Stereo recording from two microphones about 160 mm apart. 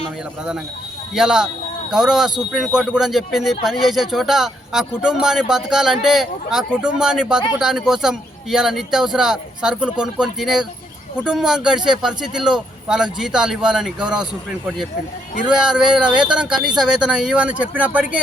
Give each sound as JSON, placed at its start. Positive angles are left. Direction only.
{"t": 1.1, "sound": "speech", "side_deg": -5}
{"t": 15.4, "sound": "speech", "side_deg": -5}